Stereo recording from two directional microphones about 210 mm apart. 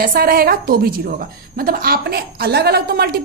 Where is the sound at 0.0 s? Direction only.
45° right (ahead or behind).